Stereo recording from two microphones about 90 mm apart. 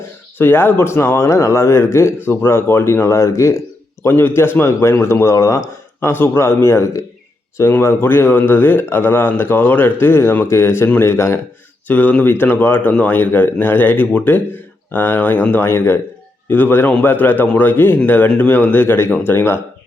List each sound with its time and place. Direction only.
0.3 s speech: 25° left (ahead or behind)
4.0 s a man's voice: 25° left (ahead or behind)
11.9 s speech: 20° left (ahead or behind)